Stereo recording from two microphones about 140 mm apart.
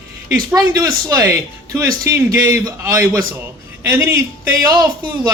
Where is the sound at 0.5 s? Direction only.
25° right (ahead or behind).